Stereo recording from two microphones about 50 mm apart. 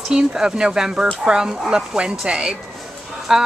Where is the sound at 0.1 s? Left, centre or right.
Centre.